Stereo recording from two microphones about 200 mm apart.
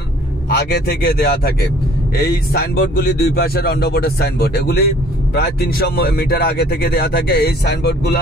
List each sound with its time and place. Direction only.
0.6 s speech: 55° left (ahead or behind)